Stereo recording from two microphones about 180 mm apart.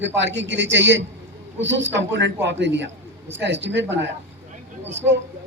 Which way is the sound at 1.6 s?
90° right.